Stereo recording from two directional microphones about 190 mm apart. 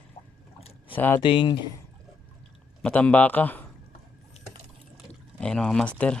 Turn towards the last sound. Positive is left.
turn(degrees=5)  # may be behind; listen again after turning